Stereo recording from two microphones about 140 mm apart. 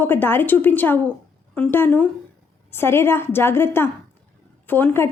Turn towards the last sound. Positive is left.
turn(degrees=15)  # may be behind; listen again after turning